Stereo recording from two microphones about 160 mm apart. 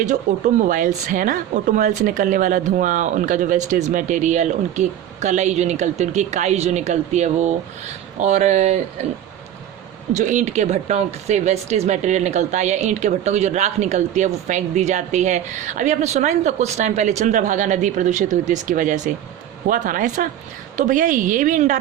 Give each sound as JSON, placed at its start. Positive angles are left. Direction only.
{"t": 0.0, "sound": "speech", "side_deg": -50}
{"t": 10.2, "sound": "a woman's voice", "side_deg": -50}